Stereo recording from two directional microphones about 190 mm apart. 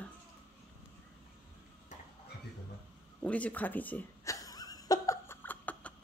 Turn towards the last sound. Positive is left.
turn(degrees=10)  # may be behind; listen again after turning